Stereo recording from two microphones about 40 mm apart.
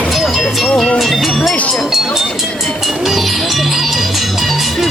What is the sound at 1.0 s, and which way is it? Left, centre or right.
Music, centre.